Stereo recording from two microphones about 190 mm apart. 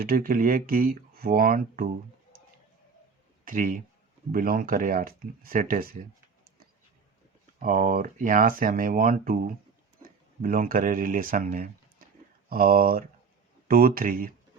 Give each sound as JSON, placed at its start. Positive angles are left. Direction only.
{"t": 0.0, "sound": "speech", "side_deg": -50}
{"t": 3.4, "sound": "a man's voice", "side_deg": -45}
{"t": 7.6, "sound": "speech", "side_deg": -45}